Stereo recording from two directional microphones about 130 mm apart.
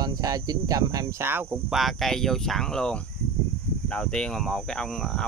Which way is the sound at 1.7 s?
Centre (ahead or behind).